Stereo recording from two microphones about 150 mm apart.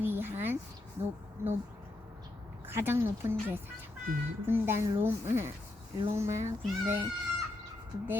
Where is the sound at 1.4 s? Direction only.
15° right (ahead or behind).